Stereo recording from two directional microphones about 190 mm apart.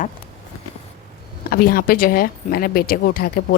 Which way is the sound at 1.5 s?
50° left (ahead or behind).